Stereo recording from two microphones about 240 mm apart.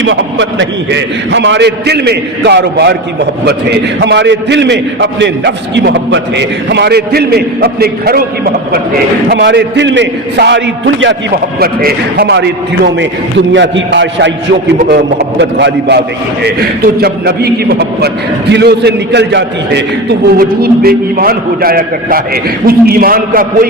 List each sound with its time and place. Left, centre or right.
0.0 s a man's voice: right
9.3 s a man's voice: right